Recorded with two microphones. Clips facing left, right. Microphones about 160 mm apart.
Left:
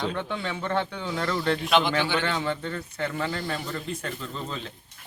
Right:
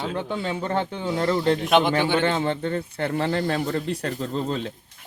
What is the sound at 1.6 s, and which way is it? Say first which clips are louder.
Speech: right 4 dB; 50° right (ahead or behind).